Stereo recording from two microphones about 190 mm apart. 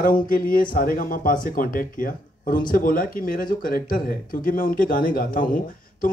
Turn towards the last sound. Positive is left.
turn(degrees=45)  # may be behind; listen again after turning